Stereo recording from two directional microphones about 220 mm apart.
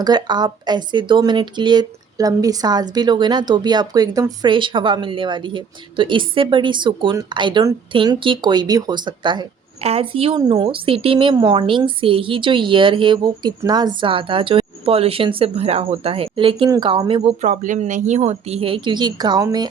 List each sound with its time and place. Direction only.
0.0 s speech: 20° right (ahead or behind)
17.4 s speech: 35° right (ahead or behind); by 19.6 s 15° right (ahead or behind)